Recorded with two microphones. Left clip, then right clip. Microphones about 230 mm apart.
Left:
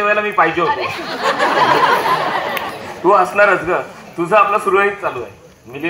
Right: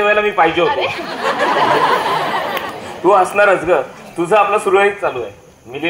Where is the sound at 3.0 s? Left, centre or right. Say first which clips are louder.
Even; right.